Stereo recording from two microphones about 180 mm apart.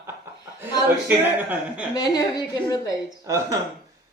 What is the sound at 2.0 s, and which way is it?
Speech, 20° left (ahead or behind).